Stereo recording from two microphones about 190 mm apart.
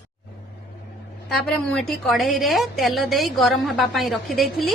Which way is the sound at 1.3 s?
5° left (ahead or behind).